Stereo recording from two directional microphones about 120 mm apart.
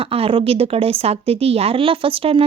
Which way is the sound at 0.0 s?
50° right (ahead or behind).